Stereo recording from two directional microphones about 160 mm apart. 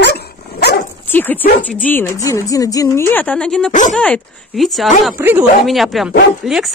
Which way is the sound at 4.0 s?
5° left (ahead or behind).